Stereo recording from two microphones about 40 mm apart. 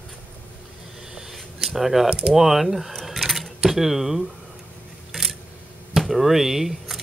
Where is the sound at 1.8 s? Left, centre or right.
Centre.